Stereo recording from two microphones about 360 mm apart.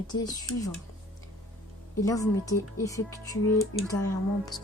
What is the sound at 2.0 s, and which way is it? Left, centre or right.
Speech, centre.